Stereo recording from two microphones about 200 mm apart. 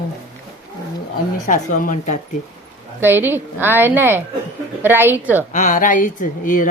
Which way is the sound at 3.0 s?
10° right (ahead or behind).